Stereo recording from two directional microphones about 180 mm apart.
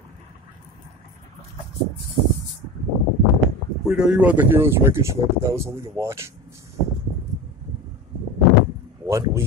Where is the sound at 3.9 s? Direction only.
5° right (ahead or behind).